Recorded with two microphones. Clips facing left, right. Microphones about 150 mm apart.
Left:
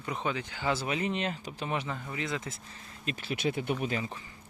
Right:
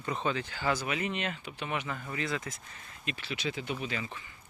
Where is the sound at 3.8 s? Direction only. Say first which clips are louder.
Left 4 dB; 40° left (ahead or behind).